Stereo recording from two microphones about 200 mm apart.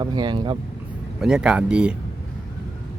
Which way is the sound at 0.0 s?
20° right (ahead or behind).